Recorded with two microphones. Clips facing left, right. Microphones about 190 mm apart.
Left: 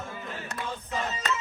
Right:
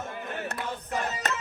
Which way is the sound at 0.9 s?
55° right (ahead or behind).